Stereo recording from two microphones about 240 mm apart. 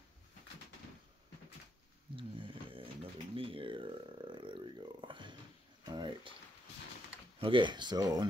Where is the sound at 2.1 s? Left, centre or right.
Right.